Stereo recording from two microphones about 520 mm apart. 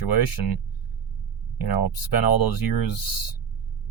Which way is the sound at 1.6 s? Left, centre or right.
Left.